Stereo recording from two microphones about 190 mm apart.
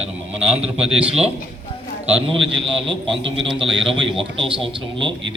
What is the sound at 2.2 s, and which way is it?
Speech, 25° right (ahead or behind).